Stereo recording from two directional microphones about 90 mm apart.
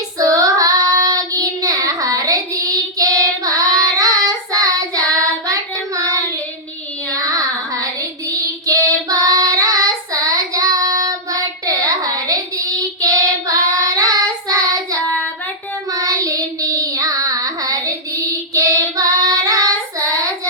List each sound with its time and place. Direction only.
0.2 s child singing: 40° right (ahead or behind)
7.3 s child singing: 40° right (ahead or behind)
15.0 s child singing: 15° left (ahead or behind)
15.9 s child singing: 40° right (ahead or behind)